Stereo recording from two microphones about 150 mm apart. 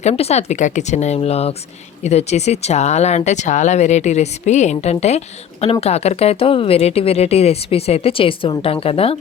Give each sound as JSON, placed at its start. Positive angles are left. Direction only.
{"t": 0.0, "sound": "speech", "side_deg": 45}